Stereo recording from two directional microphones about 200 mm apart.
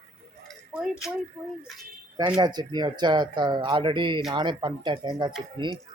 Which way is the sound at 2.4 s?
20° right (ahead or behind).